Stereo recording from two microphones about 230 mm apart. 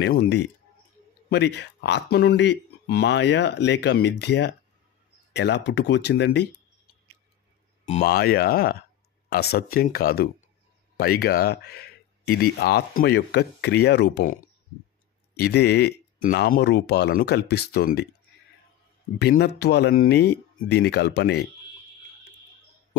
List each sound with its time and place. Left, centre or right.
0.0 s speech: left
8.0 s speech: left
19.1 s speech: left